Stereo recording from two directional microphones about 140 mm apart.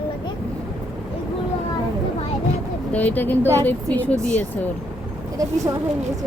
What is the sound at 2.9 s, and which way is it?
A woman's voice, 10° left (ahead or behind).